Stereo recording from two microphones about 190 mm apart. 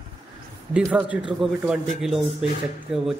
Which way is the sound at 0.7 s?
5° right (ahead or behind).